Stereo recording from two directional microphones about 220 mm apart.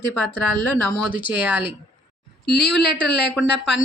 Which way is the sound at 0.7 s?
10° left (ahead or behind).